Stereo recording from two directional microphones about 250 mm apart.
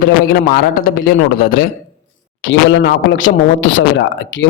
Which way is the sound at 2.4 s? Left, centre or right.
Left.